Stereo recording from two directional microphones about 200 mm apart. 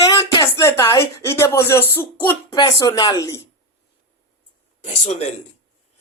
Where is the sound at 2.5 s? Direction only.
20° left (ahead or behind).